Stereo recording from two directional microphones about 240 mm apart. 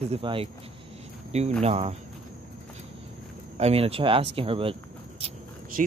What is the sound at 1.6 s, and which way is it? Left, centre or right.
Speech, right.